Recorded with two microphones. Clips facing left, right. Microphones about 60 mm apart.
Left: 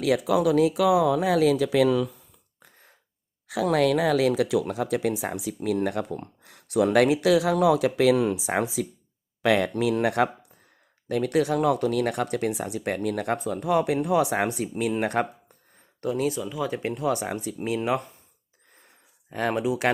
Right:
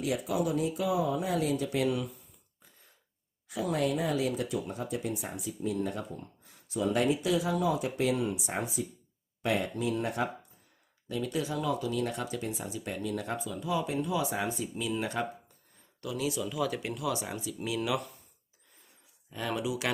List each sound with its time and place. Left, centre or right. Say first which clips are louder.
0.0 s speech: left 8 dB; left
2.6 s throat clearing: left 9 dB; left
3.5 s speech: left 8 dB; left
11.1 s speech: left 9 dB; left
16.4 s speech: left 4 dB; left
18.8 s a sound: left 5 dB; left